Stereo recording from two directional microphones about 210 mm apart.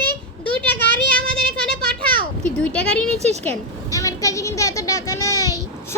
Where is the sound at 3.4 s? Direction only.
10° left (ahead or behind).